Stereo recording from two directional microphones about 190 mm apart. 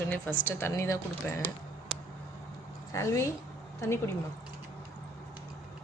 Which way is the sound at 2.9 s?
15° left (ahead or behind).